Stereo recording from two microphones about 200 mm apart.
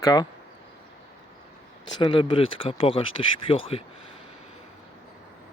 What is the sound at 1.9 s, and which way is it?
Speech, 25° left (ahead or behind).